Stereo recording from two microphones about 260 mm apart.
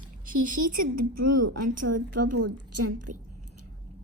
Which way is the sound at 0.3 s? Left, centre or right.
Right.